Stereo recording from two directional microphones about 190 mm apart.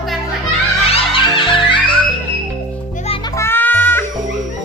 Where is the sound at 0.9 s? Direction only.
25° left (ahead or behind).